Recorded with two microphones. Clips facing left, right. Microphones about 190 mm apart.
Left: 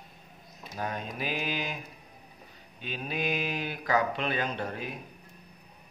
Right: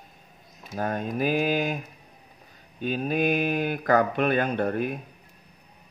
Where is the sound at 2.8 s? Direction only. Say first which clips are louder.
Right 9 dB; 45° right (ahead or behind).